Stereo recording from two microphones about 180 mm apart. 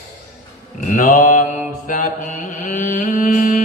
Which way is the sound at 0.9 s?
45° left (ahead or behind).